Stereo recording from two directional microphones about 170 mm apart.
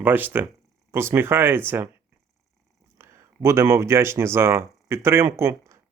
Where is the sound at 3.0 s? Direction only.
15° right (ahead or behind).